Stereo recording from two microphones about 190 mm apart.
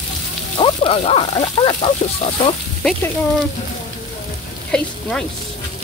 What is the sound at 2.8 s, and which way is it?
Speech, 5° left (ahead or behind).